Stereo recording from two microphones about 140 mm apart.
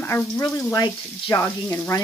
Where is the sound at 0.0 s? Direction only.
15° left (ahead or behind).